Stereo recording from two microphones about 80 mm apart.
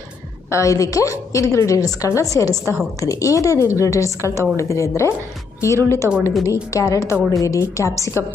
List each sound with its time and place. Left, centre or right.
0.5 s a woman's voice: left